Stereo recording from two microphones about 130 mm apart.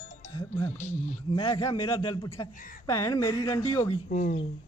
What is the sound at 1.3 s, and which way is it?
A man's voice, 40° left (ahead or behind).